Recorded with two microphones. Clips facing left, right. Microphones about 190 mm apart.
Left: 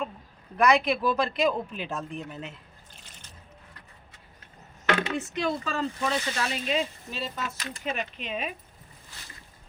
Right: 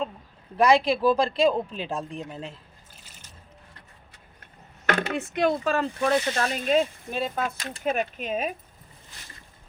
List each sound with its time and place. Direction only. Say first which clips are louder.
0.5 s speech: right 3 dB; 30° right (ahead or behind)
2.9 s a sound: left 1 dB; 5° right (ahead or behind)
4.9 s speech: right 1 dB; 45° right (ahead or behind)